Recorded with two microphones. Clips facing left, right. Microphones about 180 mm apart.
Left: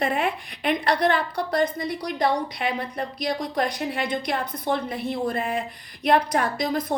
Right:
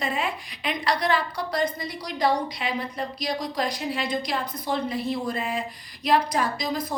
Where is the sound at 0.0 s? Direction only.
55° left (ahead or behind).